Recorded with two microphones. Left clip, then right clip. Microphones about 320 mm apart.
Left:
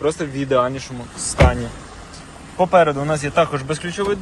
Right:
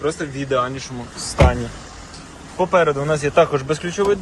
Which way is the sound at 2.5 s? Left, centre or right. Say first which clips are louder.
Left 2 dB; centre.